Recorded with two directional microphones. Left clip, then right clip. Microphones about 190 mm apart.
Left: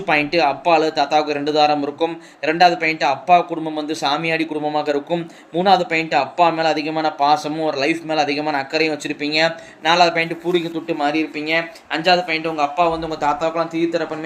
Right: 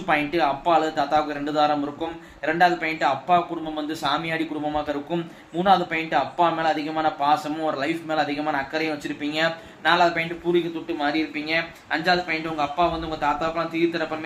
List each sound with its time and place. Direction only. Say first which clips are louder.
0.1 s a man's voice: left 5 dB; 45° left (ahead or behind)